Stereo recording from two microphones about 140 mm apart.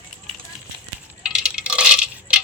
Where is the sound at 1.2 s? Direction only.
5° right (ahead or behind).